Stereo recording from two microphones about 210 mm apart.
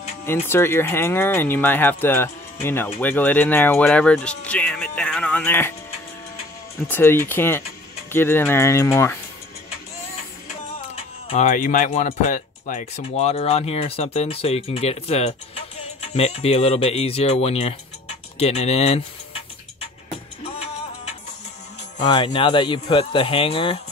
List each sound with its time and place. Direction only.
0.3 s speech: 10° left (ahead or behind)
6.9 s speech: 10° left (ahead or behind)
11.2 s speech: 35° left (ahead or behind)
21.9 s speech: 25° left (ahead or behind)